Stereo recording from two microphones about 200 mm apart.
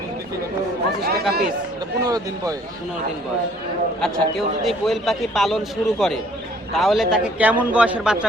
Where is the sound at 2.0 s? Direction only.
20° right (ahead or behind).